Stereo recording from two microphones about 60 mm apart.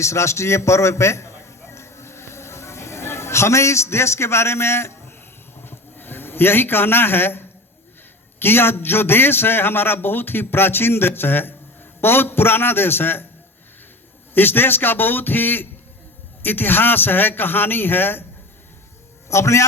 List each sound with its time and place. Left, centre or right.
0.0 s a sound: left
8.4 s a man's voice: left
14.3 s a man's voice: left
19.3 s a man's voice: left